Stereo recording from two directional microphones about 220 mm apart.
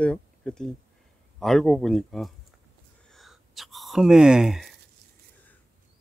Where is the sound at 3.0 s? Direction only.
Centre (ahead or behind).